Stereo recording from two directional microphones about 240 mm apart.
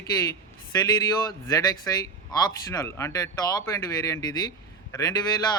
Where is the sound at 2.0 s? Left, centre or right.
Centre.